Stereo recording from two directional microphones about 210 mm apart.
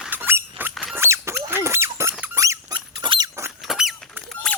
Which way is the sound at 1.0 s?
15° right (ahead or behind).